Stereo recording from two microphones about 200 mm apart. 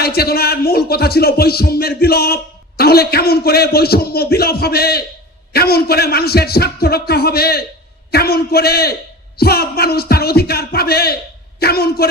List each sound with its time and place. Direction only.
0.0 s speech: 50° left (ahead or behind)